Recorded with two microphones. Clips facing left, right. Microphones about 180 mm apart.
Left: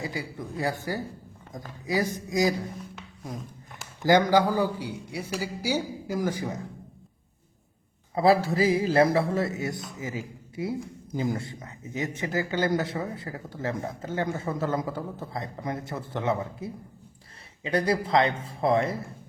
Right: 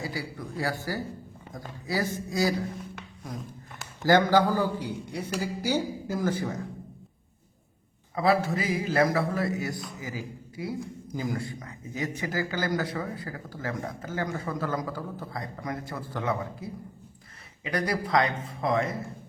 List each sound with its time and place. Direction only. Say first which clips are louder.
0.0 s a man's voice: left 1 dB; 20° left (ahead or behind)
4.0 s a man's voice: left 1 dB; 15° left (ahead or behind)
8.1 s a man's voice: left 3 dB; 30° left (ahead or behind)